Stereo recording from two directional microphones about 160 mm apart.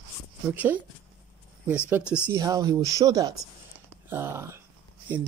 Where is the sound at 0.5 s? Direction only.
10° right (ahead or behind).